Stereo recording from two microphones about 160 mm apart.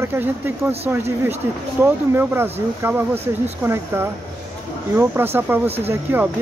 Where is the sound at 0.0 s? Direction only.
10° right (ahead or behind).